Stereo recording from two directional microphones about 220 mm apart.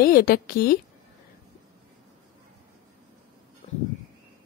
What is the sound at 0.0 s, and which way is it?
Speech, 40° left (ahead or behind).